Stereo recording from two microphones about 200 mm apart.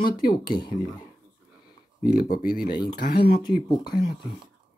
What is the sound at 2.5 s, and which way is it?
Speech, 5° right (ahead or behind).